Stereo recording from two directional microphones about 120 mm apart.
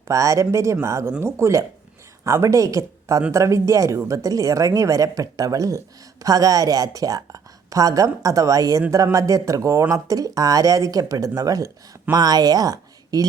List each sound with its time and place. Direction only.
0.1 s a woman's voice: 25° right (ahead or behind)